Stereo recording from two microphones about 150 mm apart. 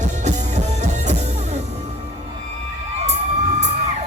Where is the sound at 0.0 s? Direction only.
55° right (ahead or behind).